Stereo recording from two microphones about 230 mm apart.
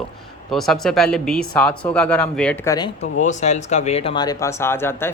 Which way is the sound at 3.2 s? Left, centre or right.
Left.